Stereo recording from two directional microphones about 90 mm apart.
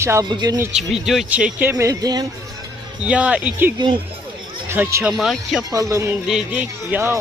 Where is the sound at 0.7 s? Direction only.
5° right (ahead or behind).